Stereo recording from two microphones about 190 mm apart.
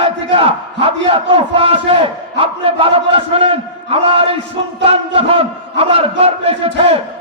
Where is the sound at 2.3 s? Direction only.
30° right (ahead or behind).